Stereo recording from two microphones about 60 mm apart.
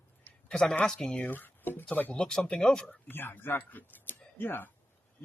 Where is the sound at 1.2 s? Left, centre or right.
Left.